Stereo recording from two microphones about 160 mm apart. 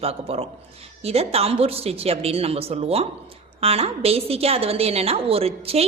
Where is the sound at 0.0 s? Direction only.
40° right (ahead or behind).